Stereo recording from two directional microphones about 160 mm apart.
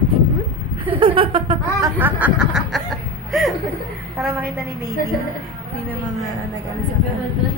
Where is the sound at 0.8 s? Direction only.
35° right (ahead or behind).